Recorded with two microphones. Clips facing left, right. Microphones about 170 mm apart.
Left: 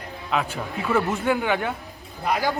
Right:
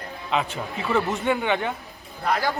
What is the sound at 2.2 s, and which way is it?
Speech, 15° left (ahead or behind).